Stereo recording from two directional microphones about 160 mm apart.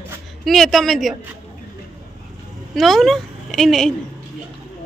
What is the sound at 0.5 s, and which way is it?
Speech, centre (ahead or behind).